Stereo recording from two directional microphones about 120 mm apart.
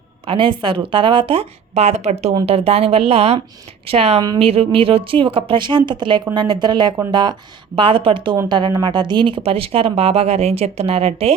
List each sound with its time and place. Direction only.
0.3 s speech: 45° right (ahead or behind); by 2.3 s 65° right (ahead or behind)
2.5 s speech: 55° right (ahead or behind)